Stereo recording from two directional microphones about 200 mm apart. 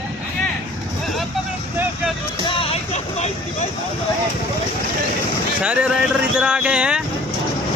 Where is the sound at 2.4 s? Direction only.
25° left (ahead or behind).